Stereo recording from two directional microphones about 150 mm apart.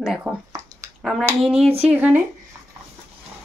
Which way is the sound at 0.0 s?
5° right (ahead or behind).